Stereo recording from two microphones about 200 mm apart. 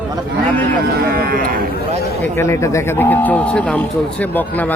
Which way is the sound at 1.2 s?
45° right (ahead or behind).